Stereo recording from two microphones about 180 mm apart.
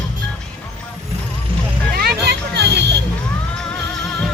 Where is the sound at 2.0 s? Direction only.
60° right (ahead or behind).